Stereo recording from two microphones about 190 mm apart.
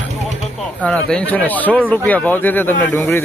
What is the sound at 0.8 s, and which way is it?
Speech, 5° left (ahead or behind).